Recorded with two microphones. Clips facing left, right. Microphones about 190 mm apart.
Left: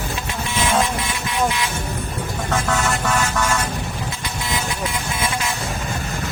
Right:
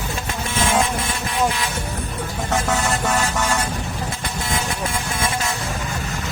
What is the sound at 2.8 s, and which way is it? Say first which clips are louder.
Music: even; 35° right (ahead or behind).